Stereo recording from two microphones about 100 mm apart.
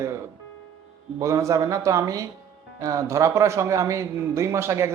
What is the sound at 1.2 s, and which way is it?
A man's voice, 30° right (ahead or behind).